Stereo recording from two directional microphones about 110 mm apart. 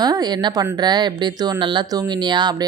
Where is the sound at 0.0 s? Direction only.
40° right (ahead or behind).